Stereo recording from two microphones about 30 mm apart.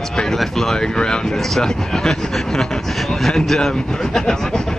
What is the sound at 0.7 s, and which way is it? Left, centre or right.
Vehicle, left.